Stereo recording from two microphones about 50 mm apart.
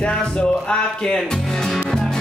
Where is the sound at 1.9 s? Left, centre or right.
Centre.